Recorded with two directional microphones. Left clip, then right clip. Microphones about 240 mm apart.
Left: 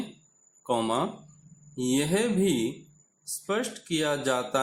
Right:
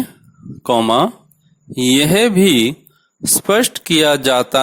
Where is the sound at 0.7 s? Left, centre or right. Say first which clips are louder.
Right 14 dB; right.